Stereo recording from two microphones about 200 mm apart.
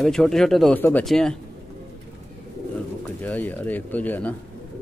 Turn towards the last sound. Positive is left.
turn(degrees=10)  # may be behind; listen again after turning